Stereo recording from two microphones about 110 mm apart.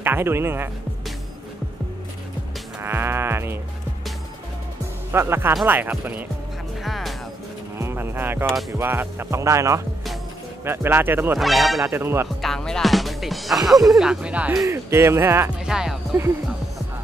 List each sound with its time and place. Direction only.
0.0 s speech: 20° right (ahead or behind)
2.8 s sheep: 20° right (ahead or behind)
5.1 s speech: 20° right (ahead or behind)
6.8 s music: centre (ahead or behind)
7.8 s speech: 20° right (ahead or behind)
11.3 s speech: centre (ahead or behind)
11.8 s speech: 20° right (ahead or behind)
12.4 s speech: 5° left (ahead or behind)
14.7 s speech: 25° right (ahead or behind)
15.6 s speech: 5° right (ahead or behind)